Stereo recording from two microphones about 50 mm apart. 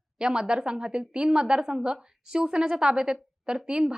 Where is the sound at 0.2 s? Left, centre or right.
Centre.